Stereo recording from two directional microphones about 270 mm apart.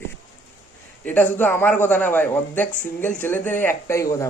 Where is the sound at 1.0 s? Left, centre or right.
Centre.